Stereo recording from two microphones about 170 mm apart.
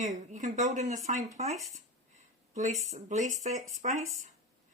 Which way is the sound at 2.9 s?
45° right (ahead or behind).